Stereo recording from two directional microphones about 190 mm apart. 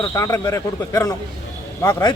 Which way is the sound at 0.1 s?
15° left (ahead or behind).